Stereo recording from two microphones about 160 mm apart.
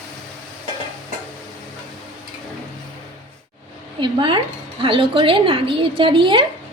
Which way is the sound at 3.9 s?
30° right (ahead or behind).